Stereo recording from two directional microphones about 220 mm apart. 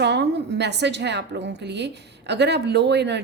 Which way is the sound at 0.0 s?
50° right (ahead or behind).